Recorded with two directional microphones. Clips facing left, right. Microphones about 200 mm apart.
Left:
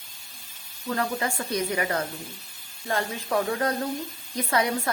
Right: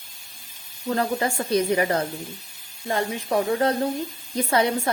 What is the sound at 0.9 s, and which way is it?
A woman's voice, 30° right (ahead or behind).